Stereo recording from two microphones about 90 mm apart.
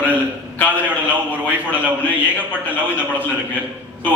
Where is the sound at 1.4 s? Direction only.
15° left (ahead or behind).